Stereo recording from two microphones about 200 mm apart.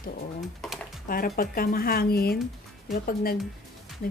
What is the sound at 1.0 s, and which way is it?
Speech, 45° left (ahead or behind).